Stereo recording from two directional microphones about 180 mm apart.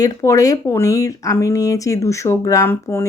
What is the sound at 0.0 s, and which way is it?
Speech, 20° left (ahead or behind).